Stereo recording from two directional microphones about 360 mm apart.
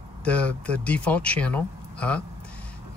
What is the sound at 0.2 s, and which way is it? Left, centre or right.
Speech, centre.